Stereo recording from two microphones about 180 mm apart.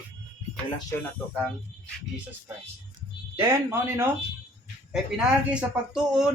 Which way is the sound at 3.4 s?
15° right (ahead or behind).